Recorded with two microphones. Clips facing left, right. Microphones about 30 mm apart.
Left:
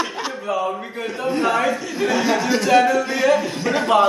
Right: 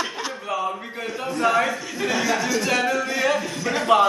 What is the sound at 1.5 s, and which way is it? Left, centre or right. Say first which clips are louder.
A man's voice: right 2 dB; centre.